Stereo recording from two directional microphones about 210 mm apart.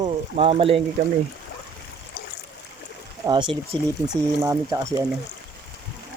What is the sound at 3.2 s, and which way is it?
Speech, 20° right (ahead or behind).